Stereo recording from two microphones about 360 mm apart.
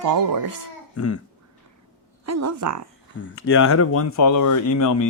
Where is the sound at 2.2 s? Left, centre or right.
Right.